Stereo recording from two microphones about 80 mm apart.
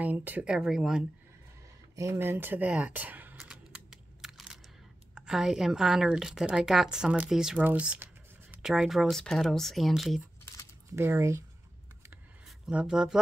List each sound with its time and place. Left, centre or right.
0.0 s speech: right
0.5 s a woman's voice: centre
2.0 s speech: right
3.3 s keys jangling: centre
5.1 s a woman's voice: centre
7.5 s a woman's voice: centre
8.6 s speech: centre
11.0 s speech: right
12.4 s speech: centre